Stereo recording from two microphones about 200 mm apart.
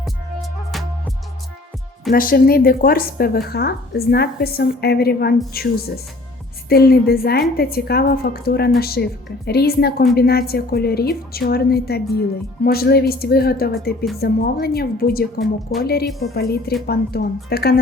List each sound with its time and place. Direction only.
0.0 s music: centre (ahead or behind)
2.1 s a woman's voice: 45° left (ahead or behind)